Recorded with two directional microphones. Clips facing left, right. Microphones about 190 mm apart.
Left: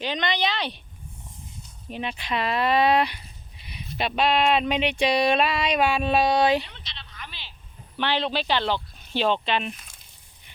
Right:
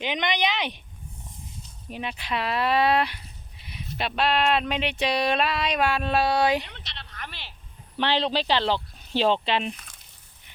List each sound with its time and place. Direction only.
0.0 s speech: 15° right (ahead or behind)
1.9 s a sound: 5° right (ahead or behind)
6.2 s speech: 10° right (ahead or behind)
6.7 s frog: 60° right (ahead or behind)
7.9 s speech: 35° right (ahead or behind)